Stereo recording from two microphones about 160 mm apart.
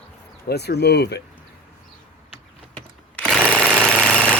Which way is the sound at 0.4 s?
90° left.